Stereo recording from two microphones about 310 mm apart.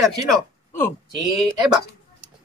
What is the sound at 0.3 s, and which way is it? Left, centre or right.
Speech, centre.